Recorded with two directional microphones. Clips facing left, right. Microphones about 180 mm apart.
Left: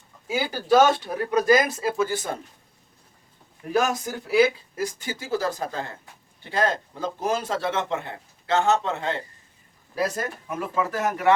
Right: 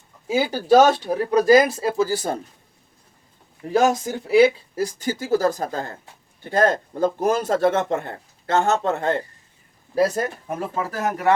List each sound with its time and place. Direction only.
0.3 s speech: 25° right (ahead or behind)
3.7 s speech: 25° right (ahead or behind); by 9.2 s 50° right (ahead or behind)
9.9 s speech: 35° right (ahead or behind)